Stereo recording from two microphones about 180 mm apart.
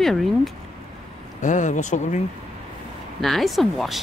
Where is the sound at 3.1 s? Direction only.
Centre (ahead or behind).